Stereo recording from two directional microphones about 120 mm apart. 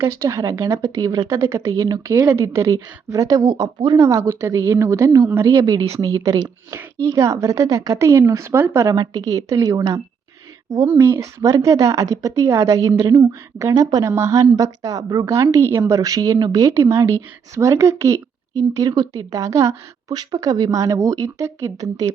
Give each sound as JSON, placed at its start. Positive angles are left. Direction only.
{"t": 0.0, "sound": "a woman's voice", "side_deg": -25}
{"t": 3.9, "sound": "a woman's voice", "side_deg": -25}